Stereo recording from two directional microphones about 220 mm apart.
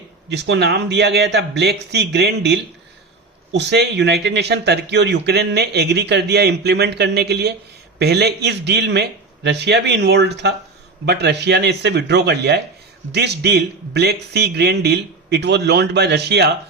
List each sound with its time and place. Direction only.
0.3 s a man's voice: 50° right (ahead or behind)